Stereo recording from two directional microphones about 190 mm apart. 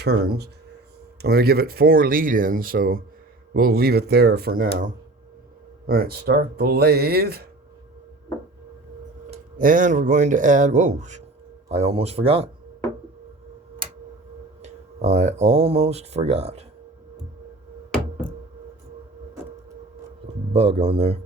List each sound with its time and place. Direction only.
0.0 s speech: 55° right (ahead or behind)
9.3 s speech: 45° right (ahead or behind); by 12.5 s 30° right (ahead or behind)
14.6 s speech: 35° right (ahead or behind)
20.5 s speech: 30° right (ahead or behind)